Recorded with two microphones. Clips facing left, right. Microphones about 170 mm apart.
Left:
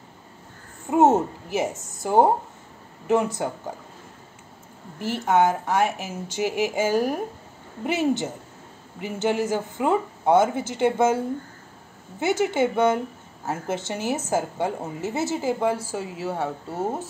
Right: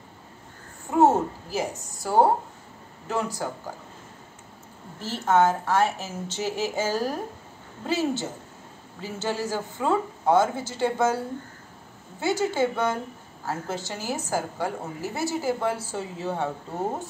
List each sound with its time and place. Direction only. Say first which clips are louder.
0.8 s a woman's voice: left 2 dB; 20° left (ahead or behind)
4.9 s a woman's voice: left 1 dB; 15° left (ahead or behind)
12.2 s a woman's voice: left 2 dB; 20° left (ahead or behind)